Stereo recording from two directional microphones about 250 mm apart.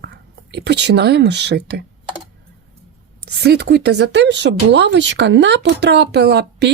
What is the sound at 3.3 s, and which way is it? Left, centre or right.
A woman's voice, right.